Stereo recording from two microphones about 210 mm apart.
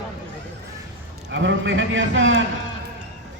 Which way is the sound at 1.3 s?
60° right (ahead or behind).